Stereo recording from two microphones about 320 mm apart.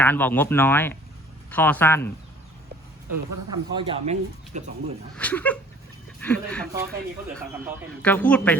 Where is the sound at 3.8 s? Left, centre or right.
Centre.